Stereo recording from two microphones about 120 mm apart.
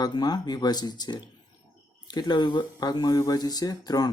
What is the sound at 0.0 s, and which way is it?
Speech, 35° left (ahead or behind).